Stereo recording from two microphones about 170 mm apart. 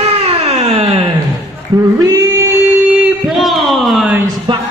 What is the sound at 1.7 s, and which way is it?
Speech, 20° right (ahead or behind).